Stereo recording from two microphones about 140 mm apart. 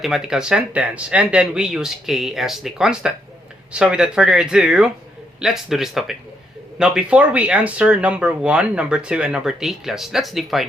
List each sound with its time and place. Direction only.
0.0 s speech: 5° right (ahead or behind)